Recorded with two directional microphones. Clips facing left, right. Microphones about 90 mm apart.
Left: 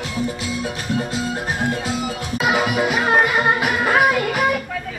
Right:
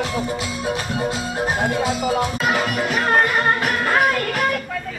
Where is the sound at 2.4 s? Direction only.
5° left (ahead or behind).